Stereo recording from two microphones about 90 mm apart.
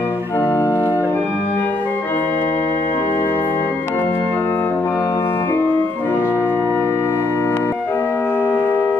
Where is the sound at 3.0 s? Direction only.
30° left (ahead or behind).